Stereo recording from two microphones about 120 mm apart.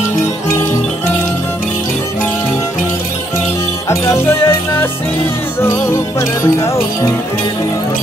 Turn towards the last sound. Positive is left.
turn(degrees=25)  # may be behind; listen again after turning